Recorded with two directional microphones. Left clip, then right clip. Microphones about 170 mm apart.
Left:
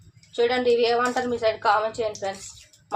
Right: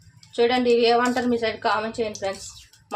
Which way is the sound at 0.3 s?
25° right (ahead or behind).